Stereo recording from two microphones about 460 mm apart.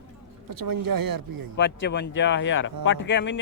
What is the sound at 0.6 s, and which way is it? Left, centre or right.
Speech, right.